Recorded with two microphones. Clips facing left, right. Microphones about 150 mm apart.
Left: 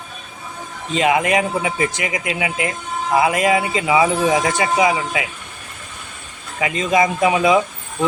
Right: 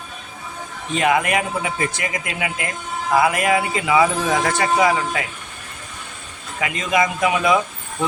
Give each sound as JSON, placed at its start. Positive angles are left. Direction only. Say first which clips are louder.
{"t": 0.9, "sound": "speech", "louder": "left 2 dB", "side_deg": 20}
{"t": 6.6, "sound": "speech", "louder": "left 3 dB", "side_deg": 25}